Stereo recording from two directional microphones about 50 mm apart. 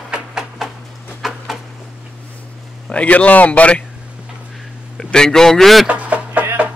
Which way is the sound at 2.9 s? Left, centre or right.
Left.